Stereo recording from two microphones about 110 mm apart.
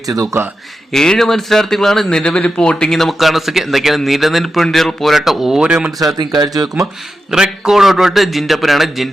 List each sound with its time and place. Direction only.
0.9 s speech: 5° left (ahead or behind)
6.1 s speech: 40° right (ahead or behind)
7.3 s speech: 5° right (ahead or behind)